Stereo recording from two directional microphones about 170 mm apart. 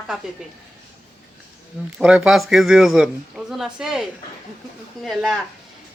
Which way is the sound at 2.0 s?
5° right (ahead or behind).